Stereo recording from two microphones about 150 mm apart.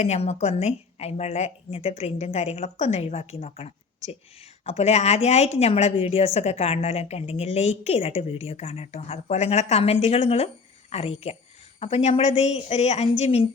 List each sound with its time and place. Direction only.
0.0 s a woman's voice: 45° left (ahead or behind)